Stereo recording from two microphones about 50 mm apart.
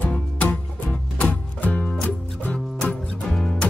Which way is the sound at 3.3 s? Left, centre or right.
Centre.